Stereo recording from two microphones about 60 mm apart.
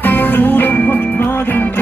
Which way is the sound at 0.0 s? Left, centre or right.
Left.